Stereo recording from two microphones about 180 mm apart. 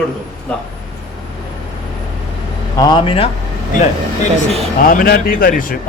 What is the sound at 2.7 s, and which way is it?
Speech, 25° left (ahead or behind).